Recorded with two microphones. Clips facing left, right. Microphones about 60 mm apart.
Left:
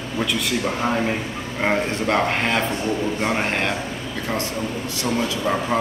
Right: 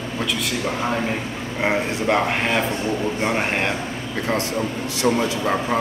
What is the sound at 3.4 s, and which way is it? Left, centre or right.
Speech, centre.